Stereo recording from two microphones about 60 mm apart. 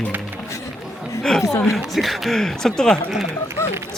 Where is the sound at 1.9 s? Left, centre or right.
Centre.